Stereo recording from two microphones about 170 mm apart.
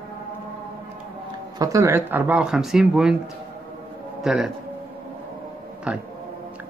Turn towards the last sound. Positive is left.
turn(degrees=-5)  # may be behind; listen again after turning